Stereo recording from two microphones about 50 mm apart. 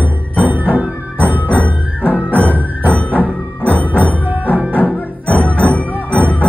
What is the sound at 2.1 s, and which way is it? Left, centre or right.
Music, left.